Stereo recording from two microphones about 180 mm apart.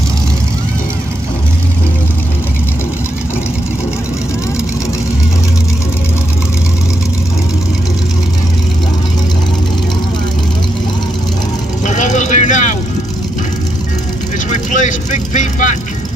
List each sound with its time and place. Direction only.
11.8 s vehicle: 45° left (ahead or behind)
14.5 s vehicle: 45° left (ahead or behind)